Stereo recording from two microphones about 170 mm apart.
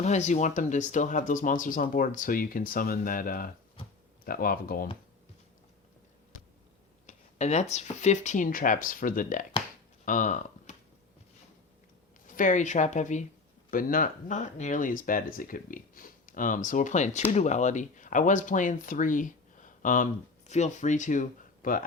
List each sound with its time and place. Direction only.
0.0 s speech: 45° left (ahead or behind); by 4.9 s 60° left (ahead or behind)
7.1 s speech: 40° left (ahead or behind)
12.4 s speech: 45° left (ahead or behind)